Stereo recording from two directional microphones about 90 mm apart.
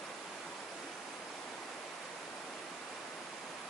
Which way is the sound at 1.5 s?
5° left (ahead or behind).